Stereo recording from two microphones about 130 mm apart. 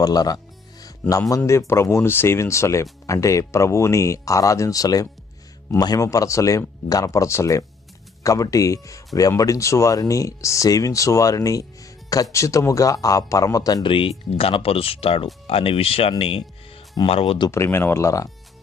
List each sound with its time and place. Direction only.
0.0 s speech: 30° left (ahead or behind)
1.5 s speech: 20° left (ahead or behind)
13.8 s speech: 40° left (ahead or behind)
17.5 s speech: 20° left (ahead or behind)